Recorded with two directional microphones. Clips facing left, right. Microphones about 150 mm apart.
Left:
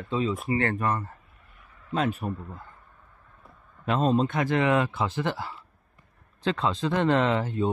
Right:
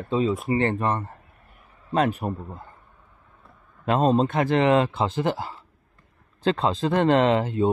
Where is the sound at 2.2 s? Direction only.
45° right (ahead or behind).